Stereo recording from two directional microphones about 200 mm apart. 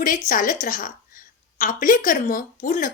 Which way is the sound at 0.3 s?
40° left (ahead or behind).